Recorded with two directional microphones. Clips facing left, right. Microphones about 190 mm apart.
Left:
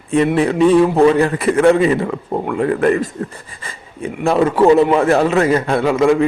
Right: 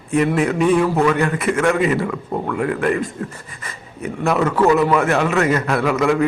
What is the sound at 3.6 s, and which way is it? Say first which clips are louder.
A man's voice: left 3 dB; 30° left (ahead or behind).